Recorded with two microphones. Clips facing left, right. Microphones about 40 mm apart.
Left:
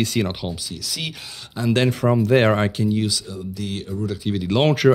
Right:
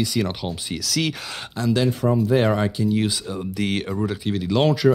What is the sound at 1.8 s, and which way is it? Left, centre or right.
Speech, left.